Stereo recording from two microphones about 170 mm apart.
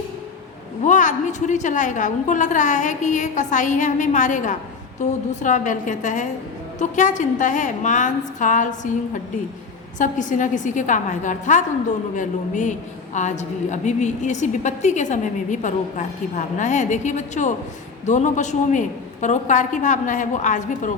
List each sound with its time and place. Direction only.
0.9 s a woman's voice: 45° left (ahead or behind)
10.0 s a woman's voice: 50° left (ahead or behind)